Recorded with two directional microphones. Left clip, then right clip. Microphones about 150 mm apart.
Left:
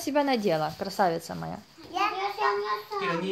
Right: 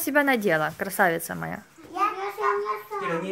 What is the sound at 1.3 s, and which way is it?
Speech, 25° right (ahead or behind).